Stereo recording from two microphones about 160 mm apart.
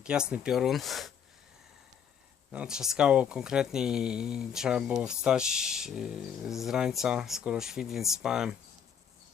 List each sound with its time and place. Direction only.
0.0 s speech: 5° right (ahead or behind)
2.5 s speech: 5° right (ahead or behind)